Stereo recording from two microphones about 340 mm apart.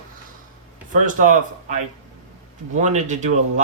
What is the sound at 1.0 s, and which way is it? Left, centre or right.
A man's voice, right.